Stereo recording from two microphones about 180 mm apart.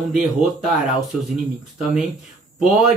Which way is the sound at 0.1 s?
Centre (ahead or behind).